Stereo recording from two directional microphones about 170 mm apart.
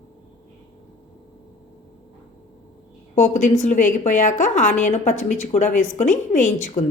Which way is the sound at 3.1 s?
45° left (ahead or behind).